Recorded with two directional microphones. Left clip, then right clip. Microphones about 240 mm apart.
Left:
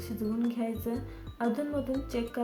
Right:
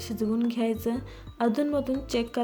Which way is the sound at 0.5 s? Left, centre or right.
Right.